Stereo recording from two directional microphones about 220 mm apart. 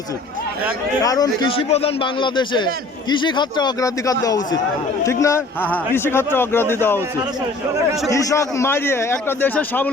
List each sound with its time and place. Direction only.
1.0 s a man's voice: 15° left (ahead or behind)
8.1 s a man's voice: 15° left (ahead or behind)